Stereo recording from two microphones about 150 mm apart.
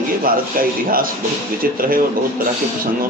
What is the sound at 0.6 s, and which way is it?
A man's voice, 70° right (ahead or behind).